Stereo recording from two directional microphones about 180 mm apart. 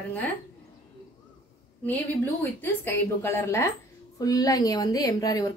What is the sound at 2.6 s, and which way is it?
A woman's voice, 10° left (ahead or behind).